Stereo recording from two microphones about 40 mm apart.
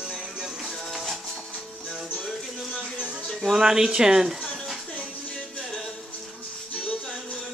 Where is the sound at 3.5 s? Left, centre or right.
Centre.